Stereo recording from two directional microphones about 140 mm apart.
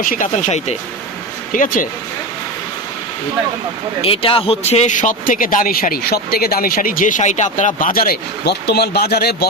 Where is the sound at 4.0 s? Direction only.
40° left (ahead or behind); by 8.2 s 90° left.